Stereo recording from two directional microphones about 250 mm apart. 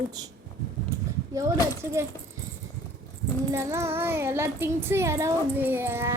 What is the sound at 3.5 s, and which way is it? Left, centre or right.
A child's voice, centre.